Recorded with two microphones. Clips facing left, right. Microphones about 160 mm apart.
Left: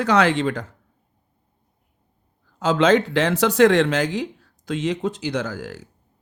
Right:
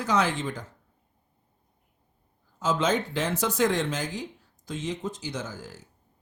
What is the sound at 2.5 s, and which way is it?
A man's voice, 70° left (ahead or behind).